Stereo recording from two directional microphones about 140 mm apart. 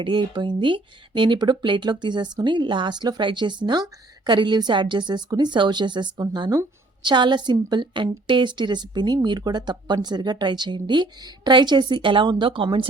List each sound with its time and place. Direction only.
0.0 s speech: 35° right (ahead or behind)